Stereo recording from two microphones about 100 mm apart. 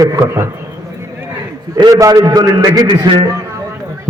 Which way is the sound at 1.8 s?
40° right (ahead or behind).